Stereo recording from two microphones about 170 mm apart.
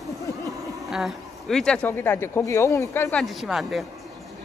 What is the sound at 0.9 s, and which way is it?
A woman's voice, centre (ahead or behind).